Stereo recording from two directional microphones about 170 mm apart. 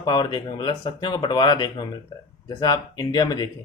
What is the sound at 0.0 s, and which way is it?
Speech, 25° left (ahead or behind).